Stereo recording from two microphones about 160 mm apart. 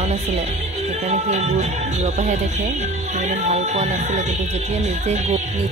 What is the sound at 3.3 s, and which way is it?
Speech, 45° right (ahead or behind).